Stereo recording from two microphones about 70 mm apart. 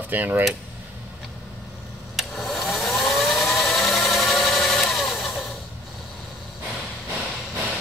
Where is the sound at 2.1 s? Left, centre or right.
Centre.